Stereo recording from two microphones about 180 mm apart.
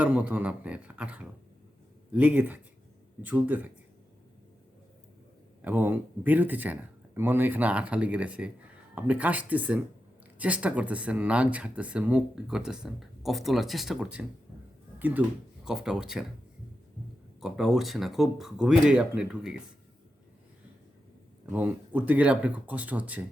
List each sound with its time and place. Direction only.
0.0 s speech: 10° right (ahead or behind)
5.6 s speech: 10° right (ahead or behind)
14.9 s a sound: 10° right (ahead or behind)
15.6 s speech: 5° right (ahead or behind)
17.4 s speech: centre (ahead or behind)
21.5 s speech: 10° right (ahead or behind)